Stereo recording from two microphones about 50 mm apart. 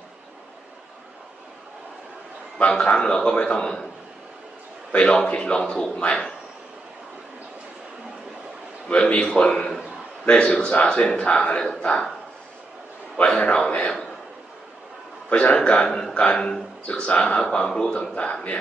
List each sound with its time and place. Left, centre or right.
2.6 s a man's voice: left
4.9 s speech: left
8.8 s speech: left
10.2 s speech: left
13.2 s a man's voice: left
13.7 s a sound: left
15.2 s speech: left